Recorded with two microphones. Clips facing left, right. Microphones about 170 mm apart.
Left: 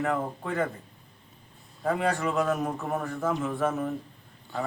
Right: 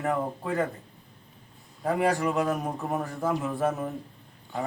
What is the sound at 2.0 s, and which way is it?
Speech, 10° right (ahead or behind).